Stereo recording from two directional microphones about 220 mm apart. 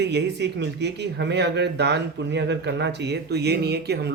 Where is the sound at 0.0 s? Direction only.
50° right (ahead or behind).